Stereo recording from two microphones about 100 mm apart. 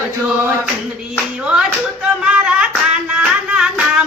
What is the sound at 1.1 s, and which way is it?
Clapping, 10° right (ahead or behind).